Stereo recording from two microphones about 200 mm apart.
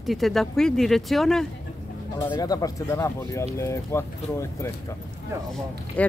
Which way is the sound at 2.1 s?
15° left (ahead or behind).